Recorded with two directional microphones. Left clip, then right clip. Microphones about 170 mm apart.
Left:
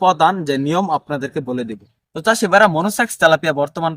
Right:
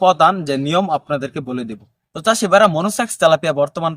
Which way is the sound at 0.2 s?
35° right (ahead or behind).